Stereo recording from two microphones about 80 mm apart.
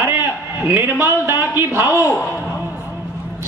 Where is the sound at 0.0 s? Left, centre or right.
Right.